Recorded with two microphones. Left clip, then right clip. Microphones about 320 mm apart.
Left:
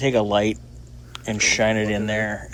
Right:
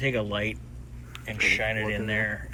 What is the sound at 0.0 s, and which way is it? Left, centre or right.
Speech, centre.